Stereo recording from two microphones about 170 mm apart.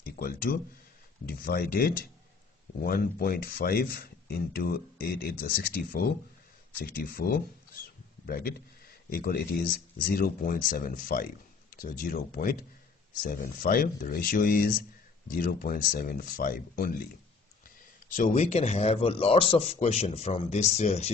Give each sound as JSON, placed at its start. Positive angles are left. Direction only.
{"t": 0.0, "sound": "speech", "side_deg": 60}